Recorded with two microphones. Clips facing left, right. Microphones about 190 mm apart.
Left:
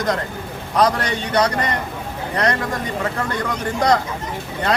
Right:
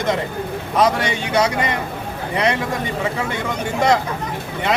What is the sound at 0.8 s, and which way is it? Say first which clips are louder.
Speech: even; 5° right (ahead or behind).